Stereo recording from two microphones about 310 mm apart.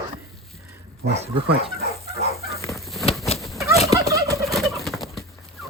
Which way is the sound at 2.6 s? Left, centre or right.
Centre.